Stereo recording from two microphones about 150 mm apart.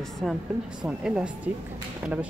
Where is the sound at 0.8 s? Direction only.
5° right (ahead or behind).